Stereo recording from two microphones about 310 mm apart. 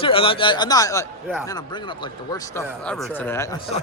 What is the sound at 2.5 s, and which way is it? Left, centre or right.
Speech, centre.